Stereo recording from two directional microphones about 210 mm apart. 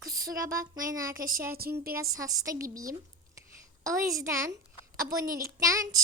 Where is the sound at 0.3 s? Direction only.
45° right (ahead or behind).